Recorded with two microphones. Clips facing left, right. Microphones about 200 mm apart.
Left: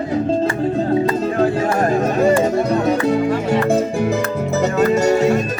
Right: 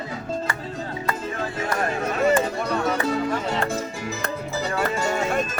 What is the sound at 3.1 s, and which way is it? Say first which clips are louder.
Music: left 8 dB; 55° left (ahead or behind).